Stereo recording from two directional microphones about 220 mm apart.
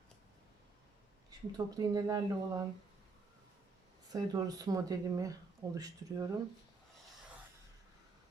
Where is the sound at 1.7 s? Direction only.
15° right (ahead or behind).